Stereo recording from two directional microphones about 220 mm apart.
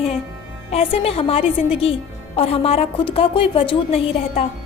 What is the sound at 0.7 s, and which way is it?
A woman's voice, 25° left (ahead or behind).